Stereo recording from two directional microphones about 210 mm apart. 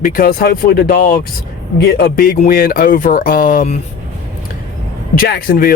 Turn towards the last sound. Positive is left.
turn(degrees=45)  # may be behind; listen again after turning